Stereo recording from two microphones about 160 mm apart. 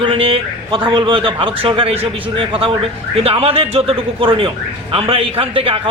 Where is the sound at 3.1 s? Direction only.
35° right (ahead or behind).